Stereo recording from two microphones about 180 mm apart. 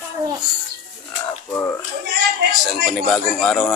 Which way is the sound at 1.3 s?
10° left (ahead or behind).